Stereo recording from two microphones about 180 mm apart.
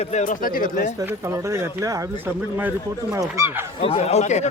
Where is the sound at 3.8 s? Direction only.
35° left (ahead or behind).